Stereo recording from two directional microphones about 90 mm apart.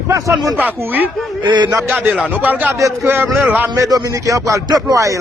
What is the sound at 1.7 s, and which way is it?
Speech, 25° right (ahead or behind).